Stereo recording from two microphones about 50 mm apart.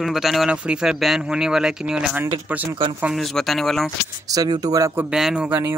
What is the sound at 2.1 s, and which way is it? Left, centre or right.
Speech, right.